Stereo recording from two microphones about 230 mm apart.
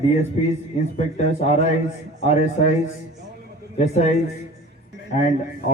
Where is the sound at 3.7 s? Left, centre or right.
Left.